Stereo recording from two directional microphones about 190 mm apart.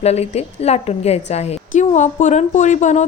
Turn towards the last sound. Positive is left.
turn(degrees=40)  # may be behind; listen again after turning